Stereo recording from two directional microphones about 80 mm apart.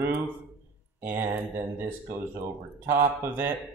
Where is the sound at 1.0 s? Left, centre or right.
Right.